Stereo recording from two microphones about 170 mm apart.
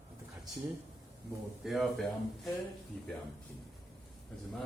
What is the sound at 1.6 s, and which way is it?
Speech, centre (ahead or behind).